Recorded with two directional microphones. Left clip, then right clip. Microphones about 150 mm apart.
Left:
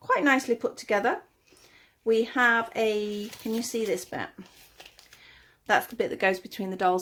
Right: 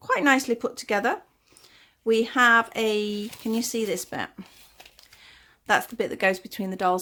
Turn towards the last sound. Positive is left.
turn(degrees=-25)  # may be behind; listen again after turning